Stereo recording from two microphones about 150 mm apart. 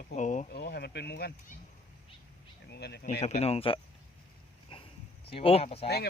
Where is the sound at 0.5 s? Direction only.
90° left.